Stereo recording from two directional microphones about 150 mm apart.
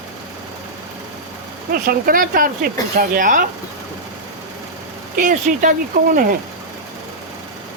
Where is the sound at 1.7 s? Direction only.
75° right (ahead or behind).